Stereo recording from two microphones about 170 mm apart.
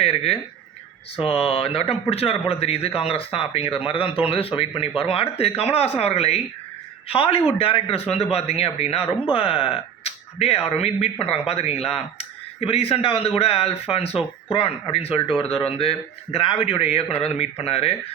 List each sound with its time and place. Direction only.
0.0 s speech: 35° left (ahead or behind)